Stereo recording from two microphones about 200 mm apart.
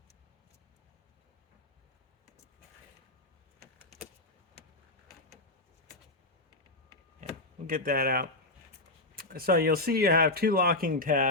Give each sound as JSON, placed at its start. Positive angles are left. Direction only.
{"t": 7.7, "sound": "speech", "side_deg": -45}